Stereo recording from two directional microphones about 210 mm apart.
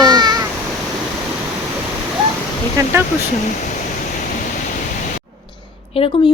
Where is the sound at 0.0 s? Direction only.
20° right (ahead or behind).